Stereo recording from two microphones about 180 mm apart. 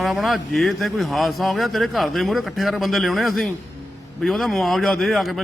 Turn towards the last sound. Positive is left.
turn(degrees=0)  # may be behind; listen again after turning